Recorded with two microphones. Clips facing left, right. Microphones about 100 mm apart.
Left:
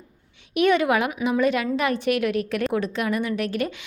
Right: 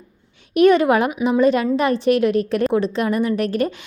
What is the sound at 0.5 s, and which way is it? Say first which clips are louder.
A woman's voice: right 6 dB; 40° right (ahead or behind).